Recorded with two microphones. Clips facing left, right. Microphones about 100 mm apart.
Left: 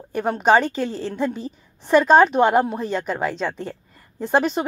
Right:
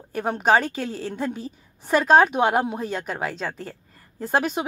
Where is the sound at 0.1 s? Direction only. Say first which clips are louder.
Left 3 dB; 5° right (ahead or behind).